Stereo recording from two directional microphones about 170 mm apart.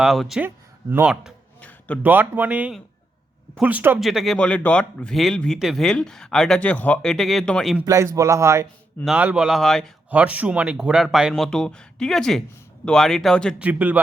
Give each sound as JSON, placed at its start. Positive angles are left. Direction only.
{"t": 0.0, "sound": "speech", "side_deg": 0}
{"t": 0.4, "sound": "a man's voice", "side_deg": -10}
{"t": 7.8, "sound": "a man's voice", "side_deg": -15}
{"t": 9.0, "sound": "speech", "side_deg": -5}
{"t": 10.1, "sound": "speech", "side_deg": -10}
{"t": 13.6, "sound": "a man's voice", "side_deg": -10}